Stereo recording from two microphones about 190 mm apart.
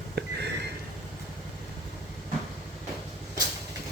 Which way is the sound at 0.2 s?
60° right (ahead or behind).